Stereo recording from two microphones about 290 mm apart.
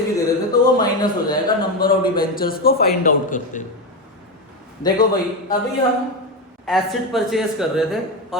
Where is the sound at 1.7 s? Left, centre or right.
Left.